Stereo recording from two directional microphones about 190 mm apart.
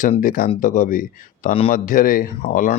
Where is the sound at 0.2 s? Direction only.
50° left (ahead or behind).